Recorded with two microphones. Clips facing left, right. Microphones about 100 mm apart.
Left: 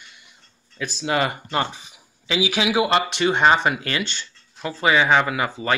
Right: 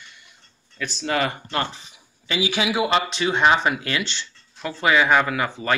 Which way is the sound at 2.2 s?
90° left.